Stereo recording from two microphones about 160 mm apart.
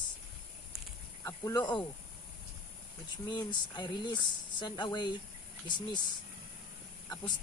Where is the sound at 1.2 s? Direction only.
15° left (ahead or behind).